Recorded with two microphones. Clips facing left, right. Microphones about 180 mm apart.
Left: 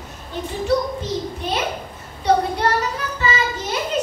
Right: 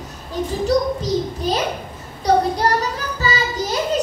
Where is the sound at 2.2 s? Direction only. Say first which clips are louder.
Right 1 dB; 35° right (ahead or behind).